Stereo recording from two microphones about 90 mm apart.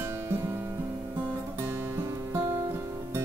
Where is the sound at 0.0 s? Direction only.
25° right (ahead or behind).